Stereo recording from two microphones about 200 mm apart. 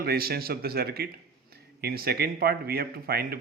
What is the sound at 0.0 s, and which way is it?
A man's voice, 50° right (ahead or behind).